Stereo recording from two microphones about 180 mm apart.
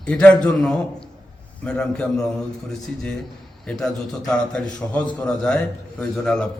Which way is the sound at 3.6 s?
Centre (ahead or behind).